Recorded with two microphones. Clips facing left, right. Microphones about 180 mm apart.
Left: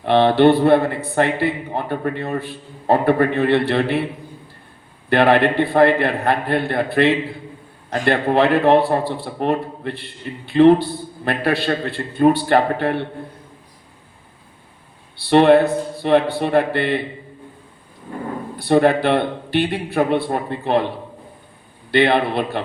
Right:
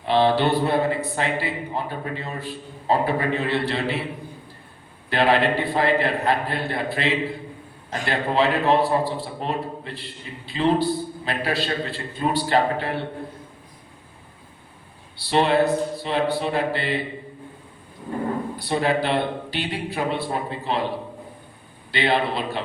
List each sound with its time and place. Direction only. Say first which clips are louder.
0.0 s a man's voice: left 6 dB; 60° left (ahead or behind)
5.0 s a man's voice: left 5 dB; 60° left (ahead or behind)
15.3 s a man's voice: left 7 dB; 60° left (ahead or behind)
18.6 s a man's voice: left 9 dB; 55° left (ahead or behind)
21.9 s a man's voice: left 6 dB; 60° left (ahead or behind)